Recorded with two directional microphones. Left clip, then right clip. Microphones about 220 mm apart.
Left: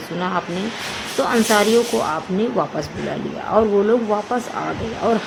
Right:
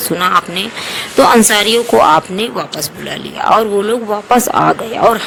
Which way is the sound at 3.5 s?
50° right (ahead or behind).